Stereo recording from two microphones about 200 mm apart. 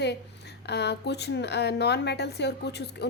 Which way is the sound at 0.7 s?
55° left (ahead or behind).